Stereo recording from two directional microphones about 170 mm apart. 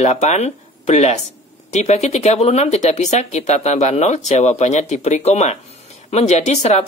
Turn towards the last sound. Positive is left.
turn(degrees=40)  # may be behind; listen again after turning